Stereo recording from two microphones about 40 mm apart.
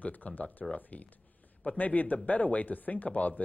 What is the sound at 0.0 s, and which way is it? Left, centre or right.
Speech, left.